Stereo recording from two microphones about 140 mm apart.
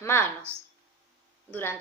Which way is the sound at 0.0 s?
15° left (ahead or behind).